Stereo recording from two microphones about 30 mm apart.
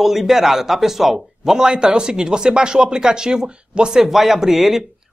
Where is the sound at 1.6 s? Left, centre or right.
Right; by 4.8 s centre.